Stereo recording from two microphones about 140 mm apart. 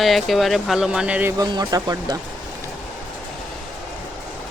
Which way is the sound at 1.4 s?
30° right (ahead or behind).